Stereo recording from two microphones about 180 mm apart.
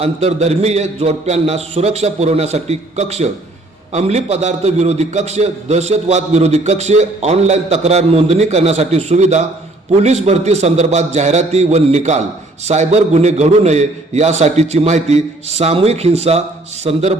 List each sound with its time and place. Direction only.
0.0 s a man's voice: 35° right (ahead or behind)